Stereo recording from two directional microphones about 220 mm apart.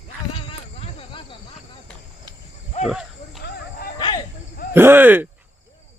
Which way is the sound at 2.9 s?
Centre (ahead or behind).